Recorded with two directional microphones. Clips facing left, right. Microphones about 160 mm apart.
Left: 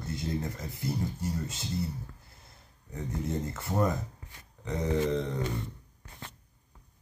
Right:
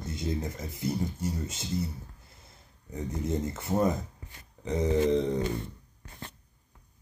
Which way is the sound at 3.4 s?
20° right (ahead or behind).